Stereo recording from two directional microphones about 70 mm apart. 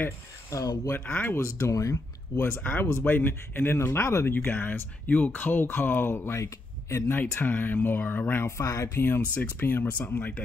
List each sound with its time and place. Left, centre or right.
0.5 s speech: left
1.0 s speech: centre
1.7 s speech: left
2.4 s speech: left
7.1 s speech: left